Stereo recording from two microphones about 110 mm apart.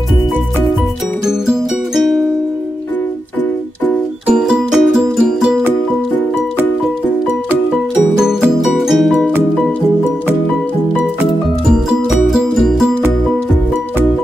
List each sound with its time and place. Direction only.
1.2 s music: centre (ahead or behind)
4.4 s music: 5° right (ahead or behind)
8.2 s music: 5° right (ahead or behind)
12.3 s music: centre (ahead or behind)